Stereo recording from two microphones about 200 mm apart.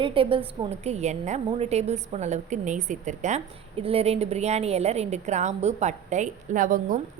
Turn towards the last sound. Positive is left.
turn(degrees=-40)  # may be behind; listen again after turning